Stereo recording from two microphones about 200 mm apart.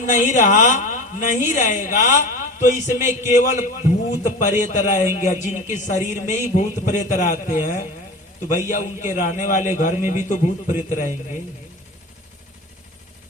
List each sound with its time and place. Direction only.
0.0 s a man's voice: 40° left (ahead or behind)